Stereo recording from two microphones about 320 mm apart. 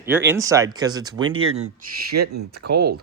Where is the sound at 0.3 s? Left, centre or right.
Centre.